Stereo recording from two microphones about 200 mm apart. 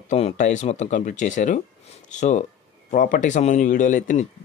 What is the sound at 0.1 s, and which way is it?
Speech, 35° left (ahead or behind).